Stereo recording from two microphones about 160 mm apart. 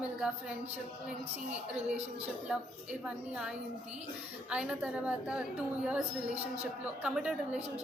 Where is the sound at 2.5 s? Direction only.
5° right (ahead or behind).